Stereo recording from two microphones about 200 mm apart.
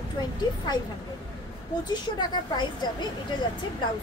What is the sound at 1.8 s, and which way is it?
A woman's voice, 20° left (ahead or behind).